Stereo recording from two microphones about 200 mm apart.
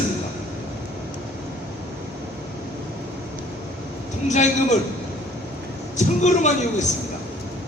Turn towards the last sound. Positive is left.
turn(degrees=35)  # may be behind; listen again after turning